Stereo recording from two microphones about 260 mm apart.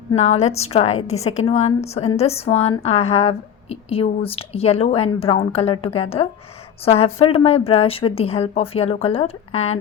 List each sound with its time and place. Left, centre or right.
0.1 s a woman's voice: left